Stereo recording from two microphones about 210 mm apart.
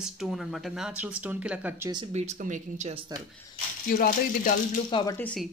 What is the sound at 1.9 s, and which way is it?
Speech, 25° right (ahead or behind).